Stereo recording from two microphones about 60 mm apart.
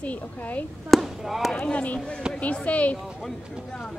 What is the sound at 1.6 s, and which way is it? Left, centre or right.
A woman's voice, left.